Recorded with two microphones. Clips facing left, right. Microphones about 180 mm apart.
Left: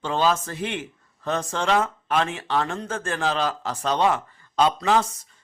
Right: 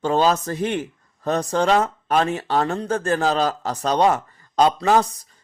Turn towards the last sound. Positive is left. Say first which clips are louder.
# right 3 dB
turn(degrees=-40)  # may be behind; listen again after turning